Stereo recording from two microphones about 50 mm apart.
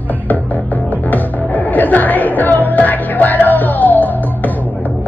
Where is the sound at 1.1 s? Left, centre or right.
Left.